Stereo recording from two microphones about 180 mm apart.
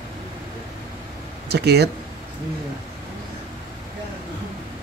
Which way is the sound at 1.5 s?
65° right (ahead or behind).